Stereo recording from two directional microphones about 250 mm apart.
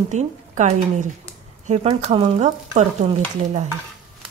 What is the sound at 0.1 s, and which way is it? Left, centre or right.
A woman's voice, right.